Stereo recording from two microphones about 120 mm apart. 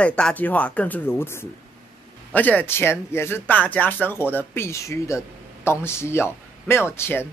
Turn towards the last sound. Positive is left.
turn(degrees=20)  # may be behind; listen again after turning